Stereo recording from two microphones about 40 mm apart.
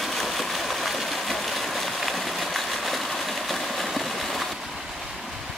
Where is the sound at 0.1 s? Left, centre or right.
Centre.